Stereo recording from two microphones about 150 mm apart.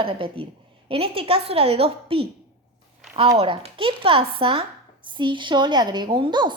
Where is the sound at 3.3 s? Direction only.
40° right (ahead or behind).